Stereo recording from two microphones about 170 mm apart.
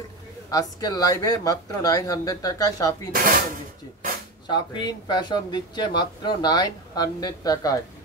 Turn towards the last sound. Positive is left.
turn(degrees=20)  # may be behind; listen again after turning